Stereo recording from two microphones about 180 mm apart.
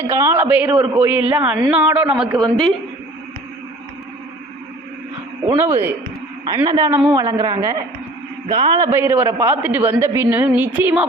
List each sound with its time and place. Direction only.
0.0 s a man's voice: 15° right (ahead or behind)
0.7 s a woman's voice: 30° right (ahead or behind)
1.0 s a man's voice: 10° right (ahead or behind)
5.5 s a man's voice: 15° right (ahead or behind)